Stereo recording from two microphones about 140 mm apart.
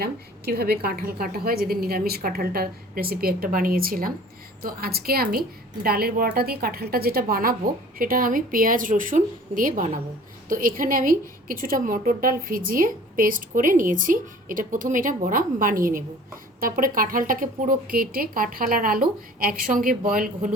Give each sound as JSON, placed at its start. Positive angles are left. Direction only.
{"t": 0.6, "sound": "a woman's voice", "side_deg": -90}
{"t": 16.6, "sound": "speech", "side_deg": -90}